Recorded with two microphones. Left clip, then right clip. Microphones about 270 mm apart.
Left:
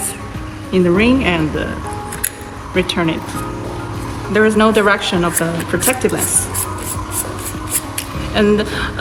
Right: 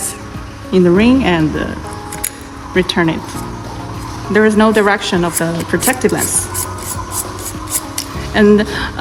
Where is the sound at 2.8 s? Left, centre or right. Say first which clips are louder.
Right 3 dB; right.